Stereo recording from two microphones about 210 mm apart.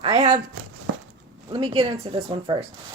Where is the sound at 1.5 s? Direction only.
25° right (ahead or behind).